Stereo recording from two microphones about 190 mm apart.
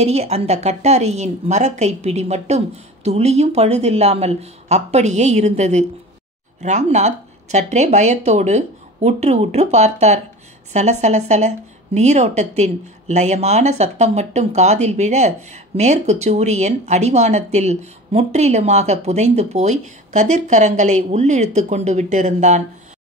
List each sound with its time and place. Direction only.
0.0 s speech: 35° right (ahead or behind)